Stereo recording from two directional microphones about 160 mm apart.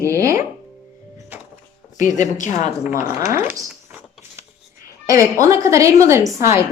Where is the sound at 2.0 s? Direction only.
50° left (ahead or behind).